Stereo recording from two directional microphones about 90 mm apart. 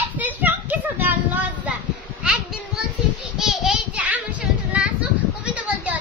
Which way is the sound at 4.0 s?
15° right (ahead or behind).